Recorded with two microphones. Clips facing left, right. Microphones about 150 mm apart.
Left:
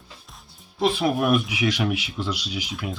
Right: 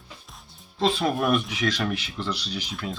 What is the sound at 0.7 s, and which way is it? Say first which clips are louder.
Speech: left 2 dB; 10° left (ahead or behind).